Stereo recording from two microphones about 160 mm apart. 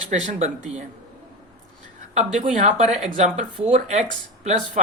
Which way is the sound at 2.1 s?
45° right (ahead or behind).